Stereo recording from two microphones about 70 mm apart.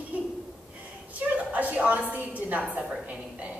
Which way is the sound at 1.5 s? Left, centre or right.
Right.